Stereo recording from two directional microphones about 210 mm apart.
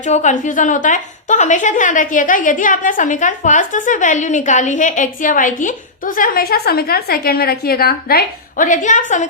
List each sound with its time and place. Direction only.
0.0 s a woman's voice: 35° left (ahead or behind)